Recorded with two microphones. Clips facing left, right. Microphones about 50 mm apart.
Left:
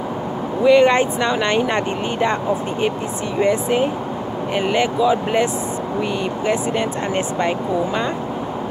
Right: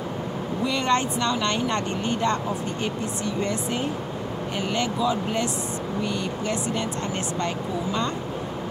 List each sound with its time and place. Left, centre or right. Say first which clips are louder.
0.7 s speech: left 11 dB; left
3.4 s speech: left 9 dB; left